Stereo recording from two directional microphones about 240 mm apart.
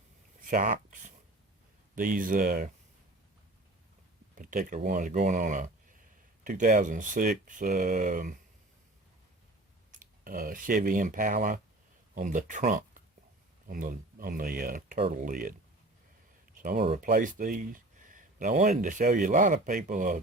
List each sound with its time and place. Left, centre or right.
0.4 s speech: right
4.4 s speech: right
9.9 s speech: right
16.8 s speech: right